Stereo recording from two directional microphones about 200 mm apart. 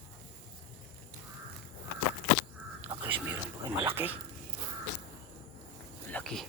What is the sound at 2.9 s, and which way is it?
Whispering, 10° right (ahead or behind).